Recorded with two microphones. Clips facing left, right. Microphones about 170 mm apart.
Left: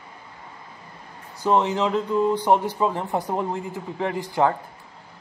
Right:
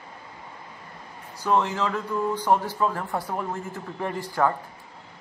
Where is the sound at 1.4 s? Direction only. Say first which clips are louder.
Left 3 dB; 20° left (ahead or behind).